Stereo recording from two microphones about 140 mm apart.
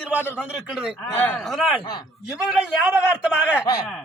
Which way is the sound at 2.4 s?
5° right (ahead or behind).